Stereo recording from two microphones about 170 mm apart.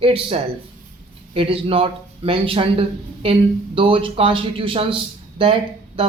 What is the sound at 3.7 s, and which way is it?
A woman's voice, 30° right (ahead or behind).